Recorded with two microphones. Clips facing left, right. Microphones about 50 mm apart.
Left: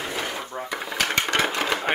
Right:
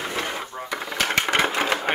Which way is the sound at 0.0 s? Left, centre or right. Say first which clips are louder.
Right 1 dB; centre.